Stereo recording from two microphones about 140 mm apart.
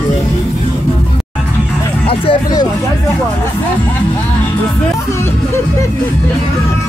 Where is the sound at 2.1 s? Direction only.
40° left (ahead or behind).